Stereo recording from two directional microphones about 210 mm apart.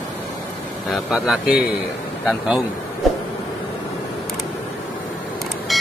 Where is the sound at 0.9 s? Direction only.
Centre (ahead or behind).